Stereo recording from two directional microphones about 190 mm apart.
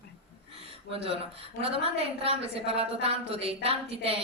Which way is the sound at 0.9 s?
30° right (ahead or behind).